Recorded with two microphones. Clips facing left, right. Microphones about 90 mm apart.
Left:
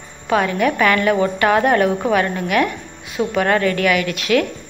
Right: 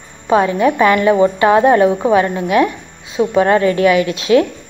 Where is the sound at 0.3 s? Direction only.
25° right (ahead or behind).